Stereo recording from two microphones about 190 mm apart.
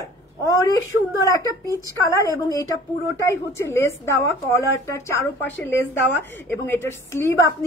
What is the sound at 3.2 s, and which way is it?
A woman's voice, 15° left (ahead or behind).